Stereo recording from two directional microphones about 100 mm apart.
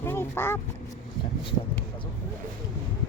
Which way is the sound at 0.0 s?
25° left (ahead or behind).